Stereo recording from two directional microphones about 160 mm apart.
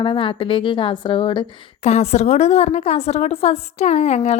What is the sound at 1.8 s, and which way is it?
Speech, 45° left (ahead or behind).